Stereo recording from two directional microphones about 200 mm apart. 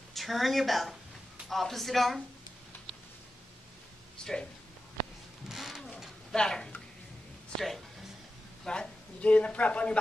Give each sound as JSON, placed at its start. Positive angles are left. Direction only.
{"t": 0.1, "sound": "a woman's voice", "side_deg": 0}
{"t": 4.2, "sound": "speech", "side_deg": 5}
{"t": 5.5, "sound": "a sound", "side_deg": 0}
{"t": 7.5, "sound": "speech", "side_deg": 0}